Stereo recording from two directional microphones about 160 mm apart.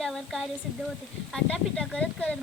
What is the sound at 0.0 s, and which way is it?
A woman's voice, centre (ahead or behind).